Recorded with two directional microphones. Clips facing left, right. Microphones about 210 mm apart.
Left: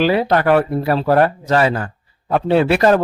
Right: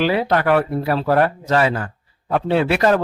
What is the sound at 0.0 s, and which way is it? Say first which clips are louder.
A man's voice: left 3 dB; 35° left (ahead or behind).